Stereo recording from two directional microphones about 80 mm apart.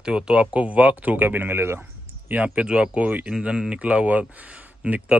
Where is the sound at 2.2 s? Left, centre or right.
Centre.